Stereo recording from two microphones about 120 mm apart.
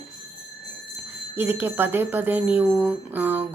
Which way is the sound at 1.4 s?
15° right (ahead or behind).